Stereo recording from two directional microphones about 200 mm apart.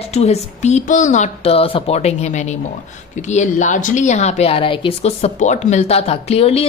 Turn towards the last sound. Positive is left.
turn(degrees=30)  # may be behind; listen again after turning